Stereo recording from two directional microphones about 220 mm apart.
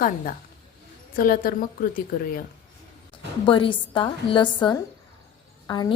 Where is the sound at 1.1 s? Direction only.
40° left (ahead or behind).